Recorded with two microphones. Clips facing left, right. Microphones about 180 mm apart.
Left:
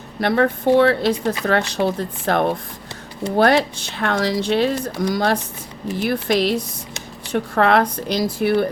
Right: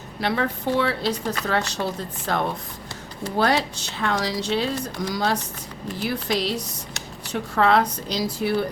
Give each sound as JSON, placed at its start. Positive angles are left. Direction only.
{"t": 0.2, "sound": "speech", "side_deg": 50}